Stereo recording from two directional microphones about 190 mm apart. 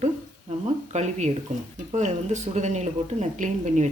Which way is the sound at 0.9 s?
35° right (ahead or behind).